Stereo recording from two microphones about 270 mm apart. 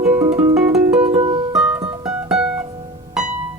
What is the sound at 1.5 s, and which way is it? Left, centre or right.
Music, centre.